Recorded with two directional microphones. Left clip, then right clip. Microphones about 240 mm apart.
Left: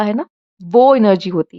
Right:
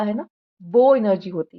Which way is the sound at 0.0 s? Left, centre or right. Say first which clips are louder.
Left 7 dB; left.